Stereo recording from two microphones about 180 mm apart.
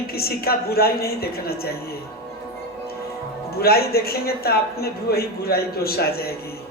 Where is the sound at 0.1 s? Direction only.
60° left (ahead or behind).